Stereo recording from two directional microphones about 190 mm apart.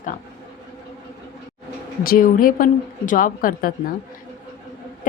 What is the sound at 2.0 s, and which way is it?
Speech, 50° left (ahead or behind).